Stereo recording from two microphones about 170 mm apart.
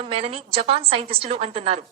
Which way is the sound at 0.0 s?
35° right (ahead or behind).